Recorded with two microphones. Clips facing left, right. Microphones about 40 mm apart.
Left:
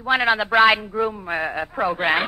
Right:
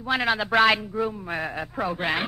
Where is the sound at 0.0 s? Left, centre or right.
Centre.